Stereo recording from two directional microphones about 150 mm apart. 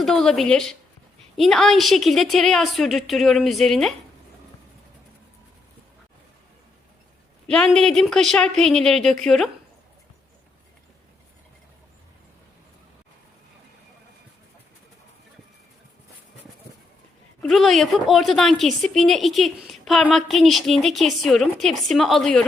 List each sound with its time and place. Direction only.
0.0 s a woman's voice: 5° left (ahead or behind)
7.4 s a woman's voice: 5° left (ahead or behind)
17.4 s a woman's voice: centre (ahead or behind)